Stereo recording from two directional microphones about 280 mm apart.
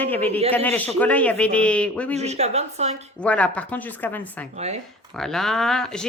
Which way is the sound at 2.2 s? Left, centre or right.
Right.